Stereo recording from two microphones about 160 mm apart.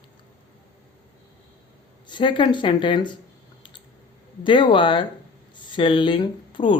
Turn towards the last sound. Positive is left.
turn(degrees=30)  # may be behind; listen again after turning